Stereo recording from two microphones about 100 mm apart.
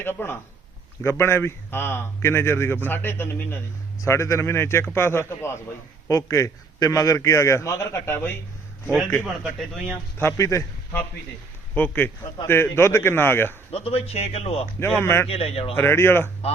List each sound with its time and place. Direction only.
0.0 s a man's voice: 20° left (ahead or behind)
9.2 s speech: centre (ahead or behind)
9.8 s a man's voice: 20° left (ahead or behind)
11.7 s a man's voice: 20° left (ahead or behind)
13.7 s speech: 85° left
14.8 s a man's voice: 20° left (ahead or behind)
15.3 s speech: 90° left
15.7 s a man's voice: 20° left (ahead or behind)